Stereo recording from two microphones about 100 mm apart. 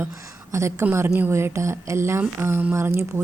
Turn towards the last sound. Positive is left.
turn(degrees=-25)  # may be behind; listen again after turning